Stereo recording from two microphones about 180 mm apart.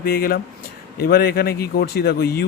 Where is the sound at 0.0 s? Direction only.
55° left (ahead or behind).